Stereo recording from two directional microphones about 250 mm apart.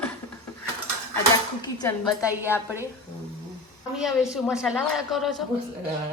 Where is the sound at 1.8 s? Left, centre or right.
Centre.